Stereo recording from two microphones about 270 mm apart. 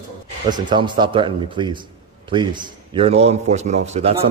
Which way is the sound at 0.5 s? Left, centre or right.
Centre.